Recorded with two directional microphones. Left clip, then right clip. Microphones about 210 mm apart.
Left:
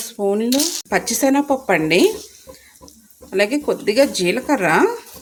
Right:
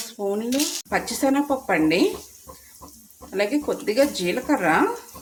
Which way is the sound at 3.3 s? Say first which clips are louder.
Left 5 dB; 45° left (ahead or behind).